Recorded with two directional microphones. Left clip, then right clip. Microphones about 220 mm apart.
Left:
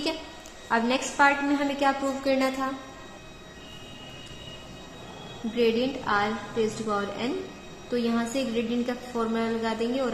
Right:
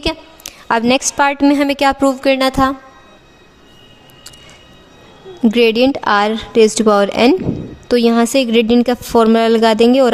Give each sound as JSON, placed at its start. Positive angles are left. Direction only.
{"t": 0.7, "sound": "a woman's voice", "side_deg": -55}
{"t": 5.5, "sound": "a woman's voice", "side_deg": -55}